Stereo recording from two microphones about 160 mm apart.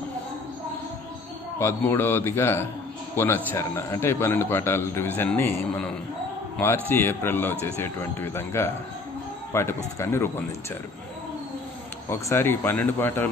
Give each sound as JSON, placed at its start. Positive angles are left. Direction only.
{"t": 1.6, "sound": "a man's voice", "side_deg": 15}
{"t": 12.1, "sound": "a man's voice", "side_deg": 15}